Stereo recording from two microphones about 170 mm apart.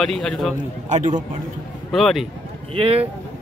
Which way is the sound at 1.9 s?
Centre (ahead or behind).